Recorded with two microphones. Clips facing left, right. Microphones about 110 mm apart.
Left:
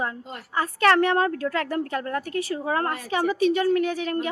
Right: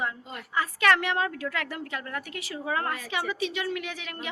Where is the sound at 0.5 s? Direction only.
40° left (ahead or behind).